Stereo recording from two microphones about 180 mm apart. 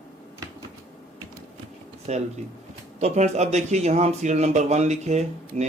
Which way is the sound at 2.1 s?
40° right (ahead or behind).